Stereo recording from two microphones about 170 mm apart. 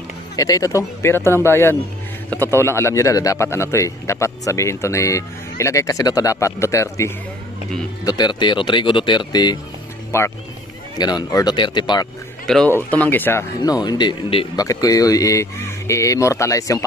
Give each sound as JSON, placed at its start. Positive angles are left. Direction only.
{"t": 0.4, "sound": "a man's voice", "side_deg": 20}
{"t": 12.4, "sound": "a man's voice", "side_deg": 5}
{"t": 13.6, "sound": "a man's voice", "side_deg": 25}